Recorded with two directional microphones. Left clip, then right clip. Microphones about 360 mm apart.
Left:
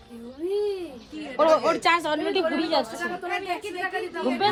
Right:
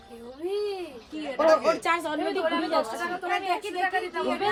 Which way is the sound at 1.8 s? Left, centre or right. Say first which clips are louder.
Left 4 dB; left.